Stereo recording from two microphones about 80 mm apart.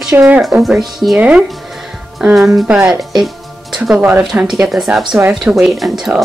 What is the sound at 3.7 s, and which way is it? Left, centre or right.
Music, centre.